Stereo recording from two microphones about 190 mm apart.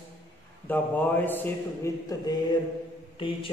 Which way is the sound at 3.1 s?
25° left (ahead or behind).